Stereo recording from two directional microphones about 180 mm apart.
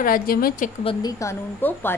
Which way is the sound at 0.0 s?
55° left (ahead or behind).